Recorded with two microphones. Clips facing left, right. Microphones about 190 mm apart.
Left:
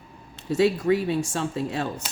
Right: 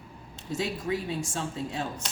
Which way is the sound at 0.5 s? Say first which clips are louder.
Left 10 dB; 65° left (ahead or behind).